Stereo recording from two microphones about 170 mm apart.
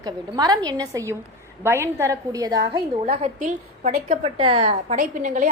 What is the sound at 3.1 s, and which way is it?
A woman's voice, 40° right (ahead or behind).